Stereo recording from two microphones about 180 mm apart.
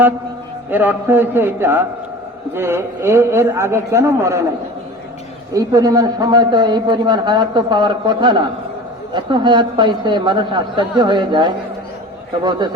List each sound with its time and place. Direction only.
0.7 s a man's voice: 10° right (ahead or behind)
5.5 s a man's voice: 20° right (ahead or behind)